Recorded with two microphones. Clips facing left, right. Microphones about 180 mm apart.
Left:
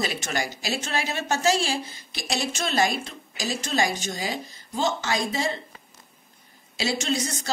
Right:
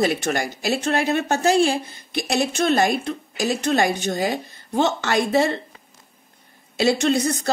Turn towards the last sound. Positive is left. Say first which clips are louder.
# right 8 dB
turn(degrees=-60)  # may be behind; listen again after turning